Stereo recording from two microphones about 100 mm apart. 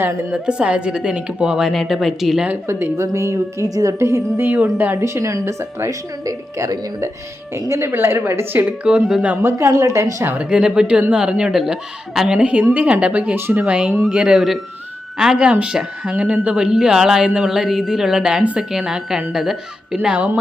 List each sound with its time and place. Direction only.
0.4 s speech: 10° right (ahead or behind)
2.5 s a woman's voice: 25° right (ahead or behind)
9.5 s a woman's voice: 30° right (ahead or behind)
10.2 s speech: 10° right (ahead or behind)